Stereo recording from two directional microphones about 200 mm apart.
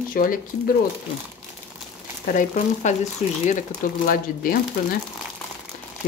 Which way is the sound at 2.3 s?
40° left (ahead or behind).